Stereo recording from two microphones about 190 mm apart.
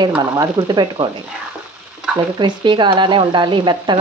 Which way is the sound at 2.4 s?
25° right (ahead or behind).